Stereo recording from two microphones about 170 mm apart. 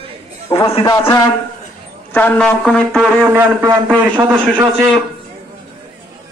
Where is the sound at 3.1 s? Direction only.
15° right (ahead or behind).